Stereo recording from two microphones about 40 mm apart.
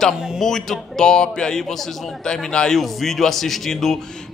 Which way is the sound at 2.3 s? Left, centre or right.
Centre.